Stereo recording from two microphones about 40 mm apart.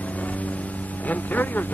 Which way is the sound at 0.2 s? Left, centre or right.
Left.